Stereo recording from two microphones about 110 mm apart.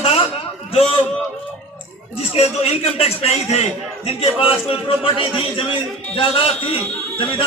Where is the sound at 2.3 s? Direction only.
70° left (ahead or behind).